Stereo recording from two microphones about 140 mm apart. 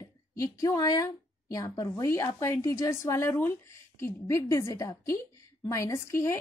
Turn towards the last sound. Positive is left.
turn(degrees=20)  # may be behind; listen again after turning